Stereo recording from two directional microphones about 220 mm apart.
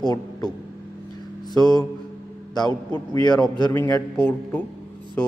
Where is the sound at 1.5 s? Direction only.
20° left (ahead or behind).